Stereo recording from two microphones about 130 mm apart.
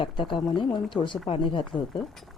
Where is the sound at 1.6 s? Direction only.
Centre (ahead or behind).